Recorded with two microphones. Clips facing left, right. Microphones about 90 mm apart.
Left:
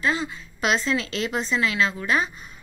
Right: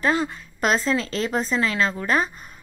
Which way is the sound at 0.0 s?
50° right (ahead or behind).